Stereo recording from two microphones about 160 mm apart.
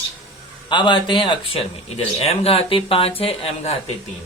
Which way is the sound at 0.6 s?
30° left (ahead or behind).